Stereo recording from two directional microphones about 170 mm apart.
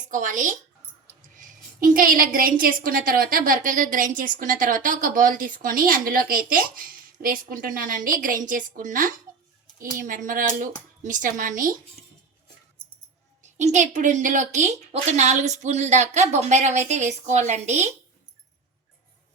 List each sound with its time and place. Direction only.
0.1 s a woman's voice: 50° right (ahead or behind)
13.4 s a woman's voice: 45° right (ahead or behind)